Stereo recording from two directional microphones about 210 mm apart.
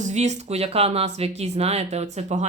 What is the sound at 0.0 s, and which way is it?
Speech, 35° right (ahead or behind).